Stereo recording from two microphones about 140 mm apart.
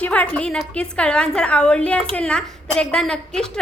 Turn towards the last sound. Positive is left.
turn(degrees=5)  # may be behind; listen again after turning